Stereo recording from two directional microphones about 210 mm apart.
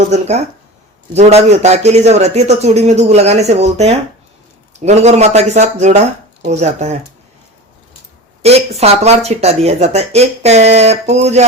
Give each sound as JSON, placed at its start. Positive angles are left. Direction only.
{"t": 0.1, "sound": "speech", "side_deg": -30}
{"t": 8.4, "sound": "speech", "side_deg": -30}